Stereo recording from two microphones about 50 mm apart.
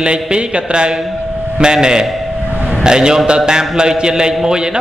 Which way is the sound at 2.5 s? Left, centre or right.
Right.